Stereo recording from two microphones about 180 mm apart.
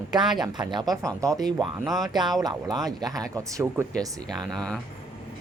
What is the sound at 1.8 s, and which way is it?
Speech, centre (ahead or behind).